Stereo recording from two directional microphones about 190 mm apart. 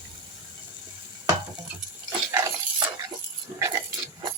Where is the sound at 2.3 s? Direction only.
15° right (ahead or behind).